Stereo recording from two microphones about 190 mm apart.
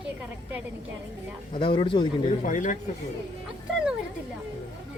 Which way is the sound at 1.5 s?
25° left (ahead or behind).